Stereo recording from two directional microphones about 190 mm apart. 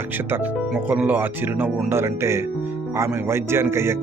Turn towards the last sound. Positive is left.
turn(degrees=-15)  # may be behind; listen again after turning